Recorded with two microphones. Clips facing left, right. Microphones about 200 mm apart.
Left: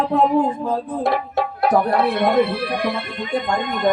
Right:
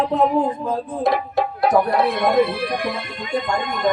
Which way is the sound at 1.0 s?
60° left (ahead or behind).